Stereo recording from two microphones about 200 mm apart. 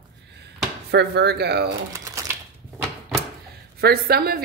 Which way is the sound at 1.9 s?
15° right (ahead or behind).